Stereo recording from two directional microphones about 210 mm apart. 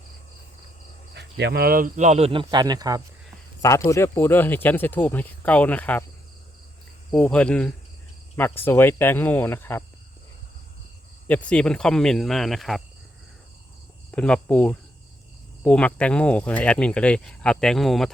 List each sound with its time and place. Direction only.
1.1 s speech: 55° right (ahead or behind); by 3.0 s 20° right (ahead or behind)
3.6 s speech: 15° left (ahead or behind)
7.1 s speech: 5° left (ahead or behind)
11.3 s speech: 5° left (ahead or behind)
14.1 s speech: 5° left (ahead or behind)